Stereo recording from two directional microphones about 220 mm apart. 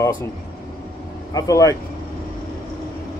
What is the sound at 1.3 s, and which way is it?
Speech, 15° left (ahead or behind).